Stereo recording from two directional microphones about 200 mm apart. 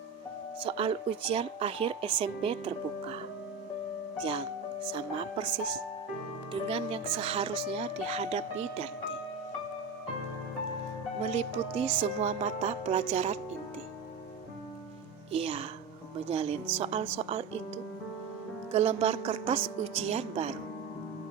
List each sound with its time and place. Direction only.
0.6 s speech: 30° right (ahead or behind)
4.2 s speech: 25° right (ahead or behind)
11.2 s speech: 35° right (ahead or behind)
15.3 s speech: 30° right (ahead or behind)
18.7 s speech: 30° right (ahead or behind)